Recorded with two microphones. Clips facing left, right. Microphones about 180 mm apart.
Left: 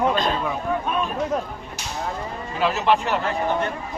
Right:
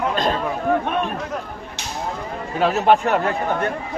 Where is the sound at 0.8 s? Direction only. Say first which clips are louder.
Right 2 dB; 60° right (ahead or behind).